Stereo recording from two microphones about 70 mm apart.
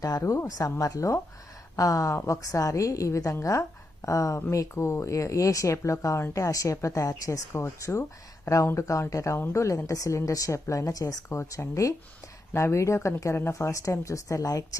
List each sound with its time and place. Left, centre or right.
0.2 s a woman's voice: left
0.4 s a woman's voice: left
11.3 s a woman's voice: left